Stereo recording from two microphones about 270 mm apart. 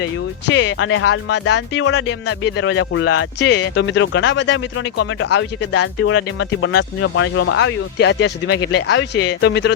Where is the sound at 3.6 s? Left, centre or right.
Left.